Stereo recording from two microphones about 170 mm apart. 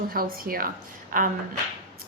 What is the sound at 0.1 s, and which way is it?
A woman's voice, 60° right (ahead or behind).